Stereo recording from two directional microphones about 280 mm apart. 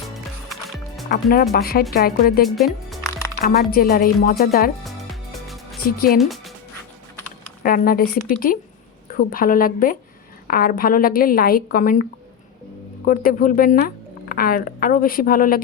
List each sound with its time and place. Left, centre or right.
0.4 s music: centre
1.1 s a woman's voice: left
2.6 s speech: centre
3.4 s a woman's voice: left
6.1 s speech: centre
7.6 s a woman's voice: left
13.1 s a woman's voice: left